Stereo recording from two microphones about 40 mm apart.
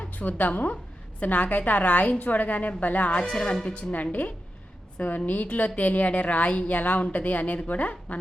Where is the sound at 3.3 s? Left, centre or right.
Centre.